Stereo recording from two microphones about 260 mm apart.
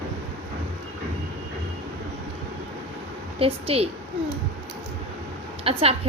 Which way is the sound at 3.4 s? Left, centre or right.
Right.